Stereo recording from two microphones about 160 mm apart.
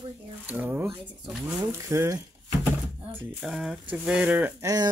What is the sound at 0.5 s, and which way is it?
Speech, 10° right (ahead or behind).